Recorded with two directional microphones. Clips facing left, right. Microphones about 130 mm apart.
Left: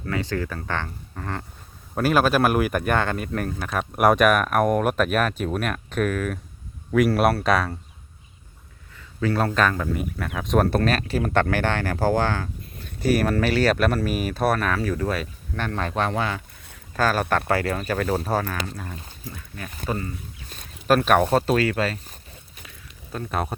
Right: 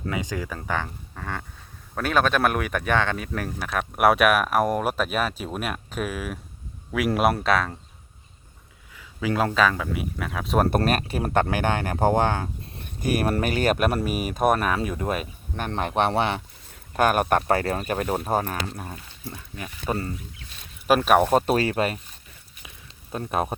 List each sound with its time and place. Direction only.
0.1 s speech: 15° right (ahead or behind)
1.1 s a sound: centre (ahead or behind)
2.0 s speech: 5° left (ahead or behind)
9.0 s a sound: 5° right (ahead or behind)
9.6 s speech: centre (ahead or behind)
11.4 s a man's voice: 15° right (ahead or behind)
20.8 s speech: 10° right (ahead or behind)
21.5 s a man's voice: 25° right (ahead or behind)
23.1 s speech: 15° right (ahead or behind)